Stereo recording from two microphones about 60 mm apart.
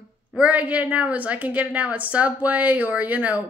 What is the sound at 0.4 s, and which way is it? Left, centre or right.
A woman's voice, right.